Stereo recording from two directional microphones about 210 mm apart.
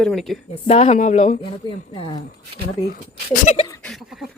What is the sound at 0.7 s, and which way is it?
Speech, 35° left (ahead or behind).